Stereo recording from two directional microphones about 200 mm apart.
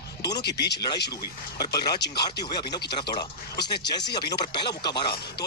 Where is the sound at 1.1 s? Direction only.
20° left (ahead or behind).